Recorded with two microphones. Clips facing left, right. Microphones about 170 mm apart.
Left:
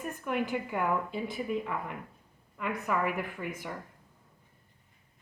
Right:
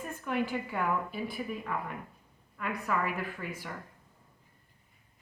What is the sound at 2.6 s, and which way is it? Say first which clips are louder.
A woman's voice: left 1 dB; 20° left (ahead or behind).